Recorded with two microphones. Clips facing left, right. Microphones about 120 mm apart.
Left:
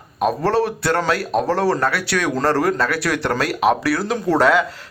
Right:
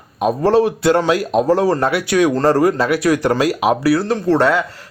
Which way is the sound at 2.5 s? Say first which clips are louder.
Right 4 dB; 5° right (ahead or behind).